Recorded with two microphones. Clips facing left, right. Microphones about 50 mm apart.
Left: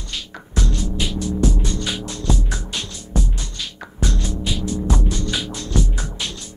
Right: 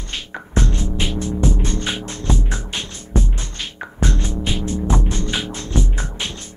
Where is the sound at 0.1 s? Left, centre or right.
Right.